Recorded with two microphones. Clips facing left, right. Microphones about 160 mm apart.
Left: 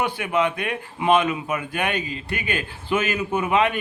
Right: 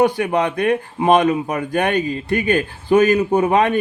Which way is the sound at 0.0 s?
40° right (ahead or behind).